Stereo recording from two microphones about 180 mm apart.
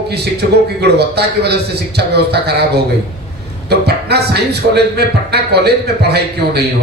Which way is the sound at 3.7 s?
65° right (ahead or behind).